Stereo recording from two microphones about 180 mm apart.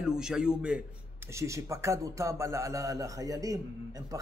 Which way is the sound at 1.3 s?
15° right (ahead or behind).